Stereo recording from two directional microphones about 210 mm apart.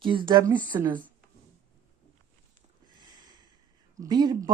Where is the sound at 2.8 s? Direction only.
20° right (ahead or behind).